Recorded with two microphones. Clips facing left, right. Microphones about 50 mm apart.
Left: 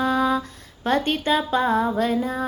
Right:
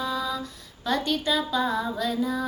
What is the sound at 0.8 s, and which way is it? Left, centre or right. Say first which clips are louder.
Music: left 4 dB; left.